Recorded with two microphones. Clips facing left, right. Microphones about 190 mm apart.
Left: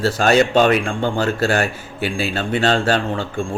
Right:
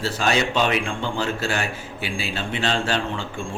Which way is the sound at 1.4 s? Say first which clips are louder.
Left 7 dB; 40° left (ahead or behind).